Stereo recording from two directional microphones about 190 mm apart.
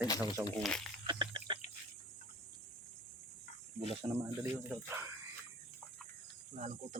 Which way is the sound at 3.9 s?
20° right (ahead or behind).